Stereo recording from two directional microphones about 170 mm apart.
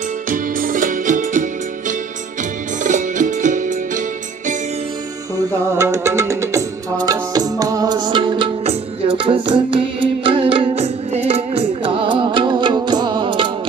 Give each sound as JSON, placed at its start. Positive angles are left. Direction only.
{"t": 0.3, "sound": "music", "side_deg": -55}
{"t": 5.8, "sound": "music", "side_deg": -15}